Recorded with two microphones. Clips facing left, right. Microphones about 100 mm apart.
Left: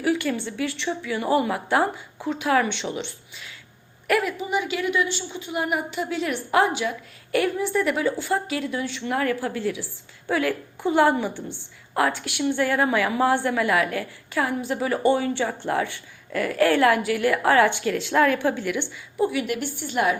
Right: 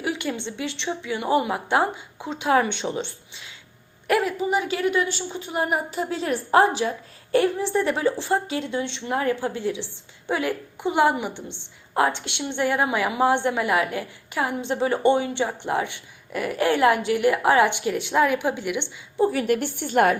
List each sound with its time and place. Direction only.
0.0 s a woman's voice: 20° right (ahead or behind)
19.2 s a woman's voice: 40° right (ahead or behind)